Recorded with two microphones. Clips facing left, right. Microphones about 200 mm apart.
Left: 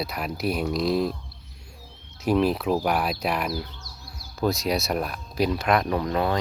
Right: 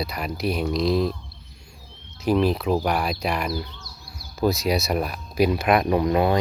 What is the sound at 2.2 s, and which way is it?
Speech, centre (ahead or behind).